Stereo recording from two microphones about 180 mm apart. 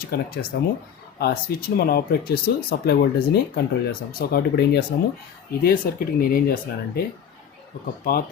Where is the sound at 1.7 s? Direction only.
55° left (ahead or behind).